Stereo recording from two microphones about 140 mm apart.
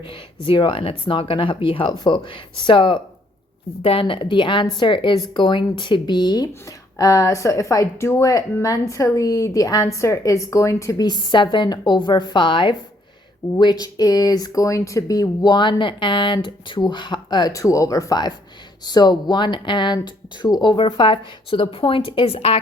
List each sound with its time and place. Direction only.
0.4 s speech: 40° left (ahead or behind)